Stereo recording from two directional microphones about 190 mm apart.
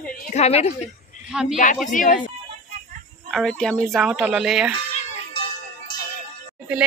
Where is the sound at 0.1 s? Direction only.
35° left (ahead or behind).